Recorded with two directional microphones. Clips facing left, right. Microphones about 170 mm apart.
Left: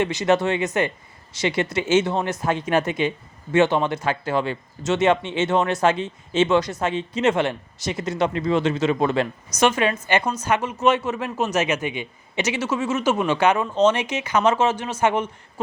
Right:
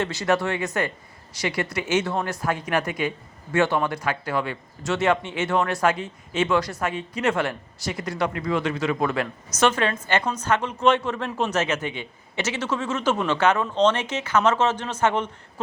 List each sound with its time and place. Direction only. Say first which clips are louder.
0.0 s speech: left 3 dB; 20° left (ahead or behind)
9.6 s a woman's voice: left 2 dB; 15° left (ahead or behind)